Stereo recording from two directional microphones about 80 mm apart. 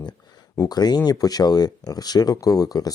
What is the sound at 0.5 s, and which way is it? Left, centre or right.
Speech, left.